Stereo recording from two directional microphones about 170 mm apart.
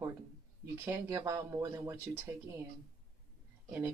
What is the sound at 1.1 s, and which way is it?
Speech, 20° right (ahead or behind).